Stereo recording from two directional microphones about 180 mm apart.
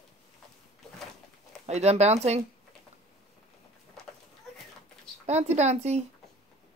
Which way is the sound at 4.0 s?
Centre (ahead or behind).